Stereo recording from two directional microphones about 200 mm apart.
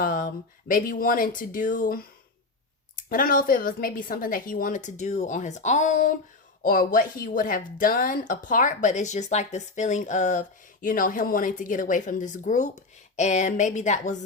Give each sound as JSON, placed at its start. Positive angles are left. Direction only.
{"t": 0.0, "sound": "a sound", "side_deg": 45}
{"t": 0.7, "sound": "a woman's voice", "side_deg": 45}
{"t": 3.1, "sound": "a woman's voice", "side_deg": 45}